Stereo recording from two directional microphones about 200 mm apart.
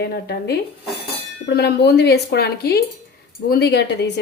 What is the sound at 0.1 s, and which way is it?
Speech, 55° left (ahead or behind).